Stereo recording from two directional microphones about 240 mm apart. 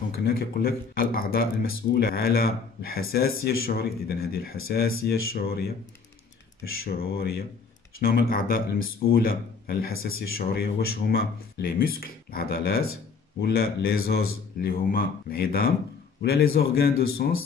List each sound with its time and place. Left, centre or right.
0.1 s speech: left
6.8 s a man's voice: left